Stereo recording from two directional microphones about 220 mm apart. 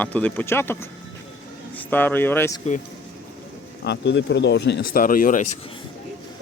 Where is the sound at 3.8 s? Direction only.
50° left (ahead or behind).